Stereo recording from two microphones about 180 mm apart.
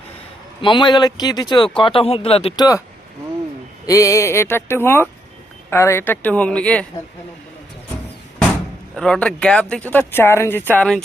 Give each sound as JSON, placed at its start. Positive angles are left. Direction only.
{"t": 0.6, "sound": "speech", "side_deg": 25}
{"t": 3.8, "sound": "speech", "side_deg": 15}
{"t": 9.0, "sound": "speech", "side_deg": 5}